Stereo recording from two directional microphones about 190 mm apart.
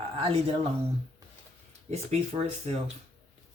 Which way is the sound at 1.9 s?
35° right (ahead or behind).